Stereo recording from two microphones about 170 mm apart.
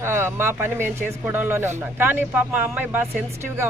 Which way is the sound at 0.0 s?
15° right (ahead or behind).